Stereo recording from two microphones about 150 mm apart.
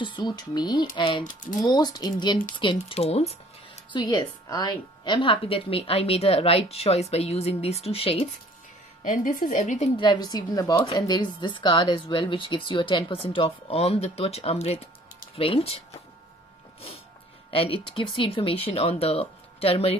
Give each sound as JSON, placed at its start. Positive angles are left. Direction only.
{"t": 0.0, "sound": "speech", "side_deg": 30}
{"t": 3.9, "sound": "speech", "side_deg": 30}
{"t": 9.0, "sound": "speech", "side_deg": 60}
{"t": 9.9, "sound": "speech", "side_deg": 30}
{"t": 17.5, "sound": "speech", "side_deg": 35}